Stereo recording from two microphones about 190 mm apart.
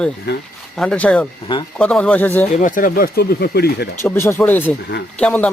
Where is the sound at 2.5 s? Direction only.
45° left (ahead or behind).